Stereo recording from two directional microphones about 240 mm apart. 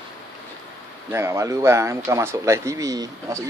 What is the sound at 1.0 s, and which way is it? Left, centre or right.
Speech, centre.